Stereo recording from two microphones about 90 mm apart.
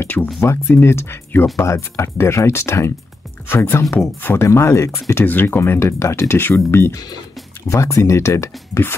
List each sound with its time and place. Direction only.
0.0 s a sound: 20° left (ahead or behind)
0.4 s speech: 30° left (ahead or behind)
5.2 s speech: 20° left (ahead or behind)